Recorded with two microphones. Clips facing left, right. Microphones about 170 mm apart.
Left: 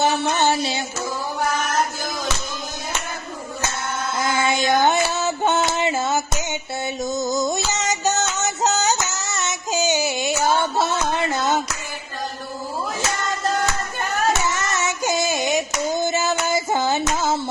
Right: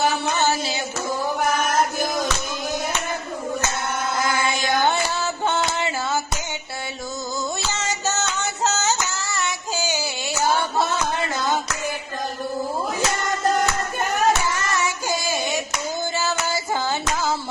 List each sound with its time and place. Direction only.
0.0 s music: 25° left (ahead or behind)
4.2 s a sound: 20° left (ahead or behind)
7.4 s music: 20° left (ahead or behind)
10.8 s a sound: 20° left (ahead or behind)
14.5 s child singing: 20° left (ahead or behind)
16.1 s music: 20° left (ahead or behind)